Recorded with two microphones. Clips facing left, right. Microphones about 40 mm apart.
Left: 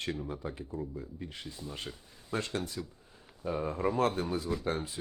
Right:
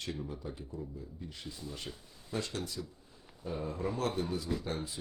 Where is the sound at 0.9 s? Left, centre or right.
Left.